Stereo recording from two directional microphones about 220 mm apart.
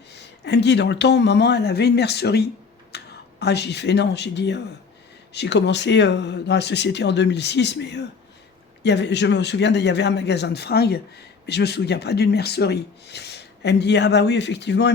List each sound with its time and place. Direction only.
0.1 s speech: 50° left (ahead or behind)
2.9 s a sound: 50° left (ahead or behind)
3.4 s speech: 50° left (ahead or behind)